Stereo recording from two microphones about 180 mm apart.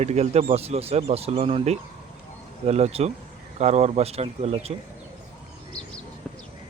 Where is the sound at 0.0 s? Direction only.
35° right (ahead or behind).